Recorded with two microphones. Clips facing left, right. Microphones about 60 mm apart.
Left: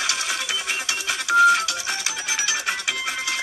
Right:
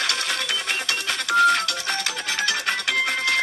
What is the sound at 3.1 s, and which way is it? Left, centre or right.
Music, right.